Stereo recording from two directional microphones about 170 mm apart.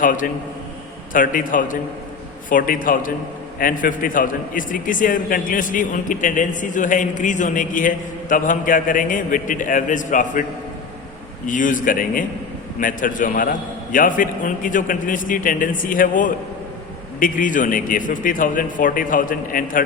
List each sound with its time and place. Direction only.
0.0 s a man's voice: 50° left (ahead or behind)
11.4 s a man's voice: 50° left (ahead or behind)